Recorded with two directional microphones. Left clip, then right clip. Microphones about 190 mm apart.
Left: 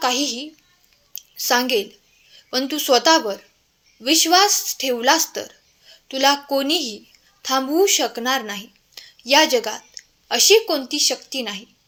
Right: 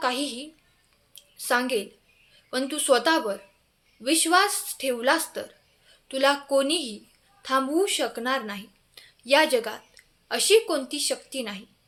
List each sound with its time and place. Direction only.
0.0 s a woman's voice: 20° left (ahead or behind)
1.1 s a sound: 25° left (ahead or behind)
2.3 s a woman's voice: 20° left (ahead or behind)